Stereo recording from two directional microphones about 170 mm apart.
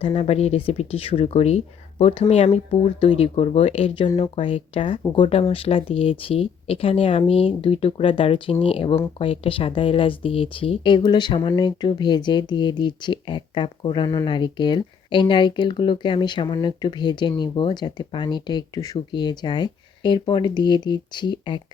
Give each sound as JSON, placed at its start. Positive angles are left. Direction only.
{"t": 0.0, "sound": "speech", "side_deg": 35}